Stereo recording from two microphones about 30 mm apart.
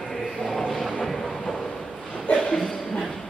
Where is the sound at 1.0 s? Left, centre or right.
Centre.